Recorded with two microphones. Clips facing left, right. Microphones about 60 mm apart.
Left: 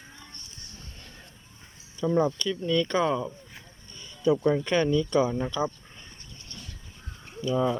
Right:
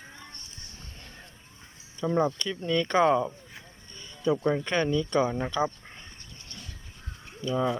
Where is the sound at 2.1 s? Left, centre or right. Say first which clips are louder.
Left 2 dB; right.